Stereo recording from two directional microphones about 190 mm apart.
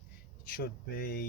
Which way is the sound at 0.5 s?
50° left (ahead or behind).